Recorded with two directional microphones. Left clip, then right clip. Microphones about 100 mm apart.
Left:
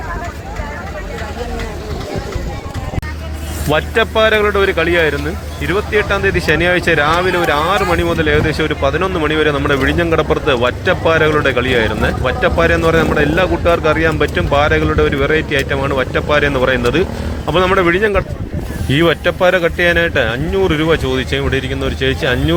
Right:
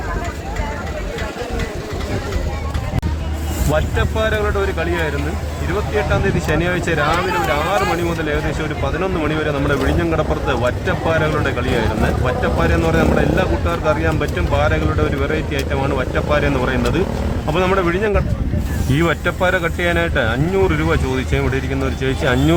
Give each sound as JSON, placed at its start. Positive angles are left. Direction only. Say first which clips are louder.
{"t": 3.7, "sound": "a man's voice", "louder": "left 6 dB", "side_deg": 30}
{"t": 22.2, "sound": "speech", "louder": "right 2 dB", "side_deg": 5}